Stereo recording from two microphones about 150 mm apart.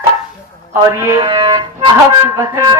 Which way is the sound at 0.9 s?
20° right (ahead or behind).